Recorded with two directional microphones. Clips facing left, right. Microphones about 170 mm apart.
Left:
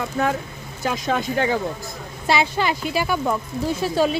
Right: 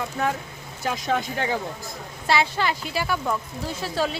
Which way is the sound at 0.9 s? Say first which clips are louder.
Left 2 dB; 90° left.